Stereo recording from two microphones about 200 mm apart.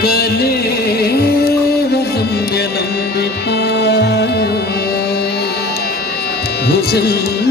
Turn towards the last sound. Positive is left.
turn(degrees=50)  # may be behind; listen again after turning